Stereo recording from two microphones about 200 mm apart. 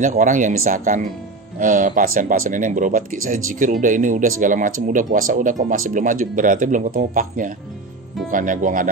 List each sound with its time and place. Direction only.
0.0 s speech: 40° right (ahead or behind)